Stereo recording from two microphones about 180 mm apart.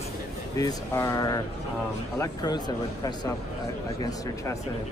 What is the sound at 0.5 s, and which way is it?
Speech, 20° left (ahead or behind).